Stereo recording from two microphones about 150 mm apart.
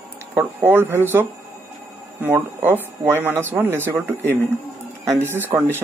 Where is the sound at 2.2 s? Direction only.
15° right (ahead or behind).